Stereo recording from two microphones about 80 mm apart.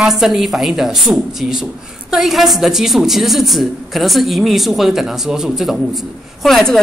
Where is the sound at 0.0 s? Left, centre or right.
Centre.